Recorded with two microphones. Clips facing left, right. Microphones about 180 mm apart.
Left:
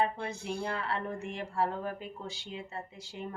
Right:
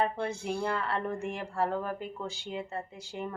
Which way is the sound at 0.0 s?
50° right (ahead or behind).